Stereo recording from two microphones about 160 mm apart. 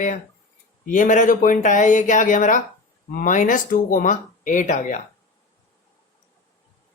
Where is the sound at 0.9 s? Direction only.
55° left (ahead or behind).